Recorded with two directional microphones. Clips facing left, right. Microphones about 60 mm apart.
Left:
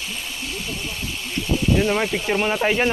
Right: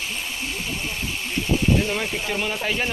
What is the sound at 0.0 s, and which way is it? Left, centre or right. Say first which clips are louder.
Vehicle: right 1 dB; centre.